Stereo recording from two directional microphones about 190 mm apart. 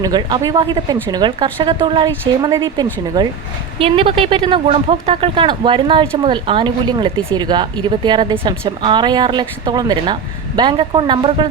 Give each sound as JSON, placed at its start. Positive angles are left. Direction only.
{"t": 0.0, "sound": "speech", "side_deg": -20}